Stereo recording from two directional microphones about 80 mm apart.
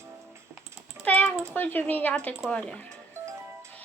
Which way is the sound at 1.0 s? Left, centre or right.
Centre.